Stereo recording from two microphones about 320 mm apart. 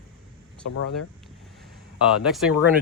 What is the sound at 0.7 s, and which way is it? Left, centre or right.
Speech, left.